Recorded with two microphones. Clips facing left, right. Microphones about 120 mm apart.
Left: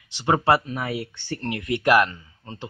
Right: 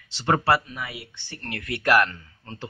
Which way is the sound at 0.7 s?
40° left (ahead or behind).